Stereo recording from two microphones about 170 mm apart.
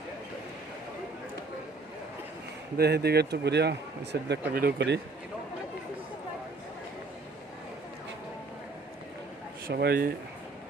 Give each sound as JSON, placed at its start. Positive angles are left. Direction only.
{"t": 2.7, "sound": "speech", "side_deg": -70}
{"t": 9.6, "sound": "speech", "side_deg": -65}